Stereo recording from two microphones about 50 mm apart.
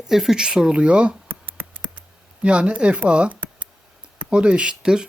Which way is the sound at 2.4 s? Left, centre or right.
Right.